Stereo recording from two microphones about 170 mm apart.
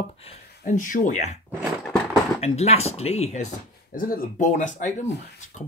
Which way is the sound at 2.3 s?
40° left (ahead or behind).